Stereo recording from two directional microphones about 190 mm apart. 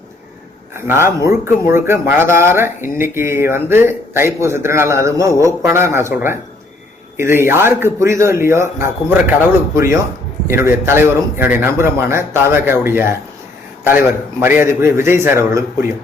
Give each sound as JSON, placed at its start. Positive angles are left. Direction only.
{"t": 0.7, "sound": "speech", "side_deg": -10}
{"t": 14.4, "sound": "speech", "side_deg": -10}